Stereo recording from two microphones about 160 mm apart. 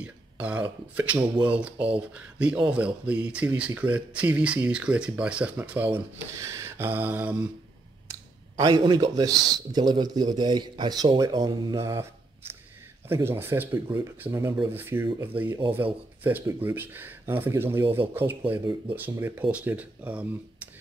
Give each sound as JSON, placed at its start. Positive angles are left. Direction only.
{"t": 0.0, "sound": "speech", "side_deg": -10}
{"t": 8.1, "sound": "speech", "side_deg": -20}
{"t": 13.1, "sound": "speech", "side_deg": -15}
{"t": 18.6, "sound": "speech", "side_deg": -30}
{"t": 18.9, "sound": "speech", "side_deg": -10}